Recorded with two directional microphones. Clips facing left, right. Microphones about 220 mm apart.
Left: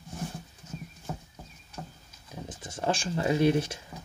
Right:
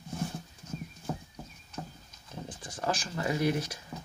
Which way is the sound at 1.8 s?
5° right (ahead or behind).